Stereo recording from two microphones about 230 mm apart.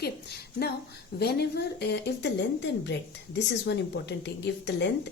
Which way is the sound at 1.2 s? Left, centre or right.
Left.